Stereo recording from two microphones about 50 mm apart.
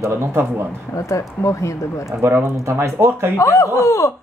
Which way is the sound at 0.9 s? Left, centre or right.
Left.